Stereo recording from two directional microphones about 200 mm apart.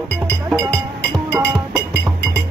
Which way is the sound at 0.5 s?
Centre (ahead or behind).